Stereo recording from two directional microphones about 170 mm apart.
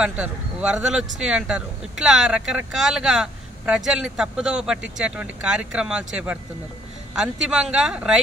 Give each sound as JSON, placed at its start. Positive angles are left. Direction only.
{"t": 0.0, "sound": "speech", "side_deg": -5}